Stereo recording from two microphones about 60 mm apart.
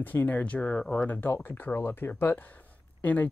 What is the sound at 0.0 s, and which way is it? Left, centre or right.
Speech, left.